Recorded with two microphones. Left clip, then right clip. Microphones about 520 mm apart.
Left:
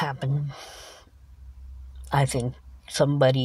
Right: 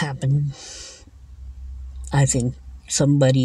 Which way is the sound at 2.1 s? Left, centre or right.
Left.